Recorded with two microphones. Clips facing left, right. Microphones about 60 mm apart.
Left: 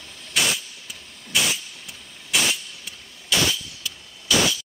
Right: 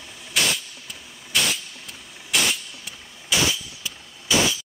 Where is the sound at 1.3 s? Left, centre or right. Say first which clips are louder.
Even; centre.